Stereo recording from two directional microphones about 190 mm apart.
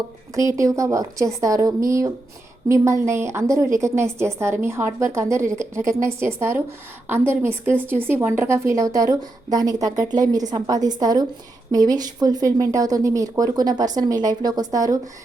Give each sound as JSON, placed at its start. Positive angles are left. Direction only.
{"t": 0.3, "sound": "a woman's voice", "side_deg": -15}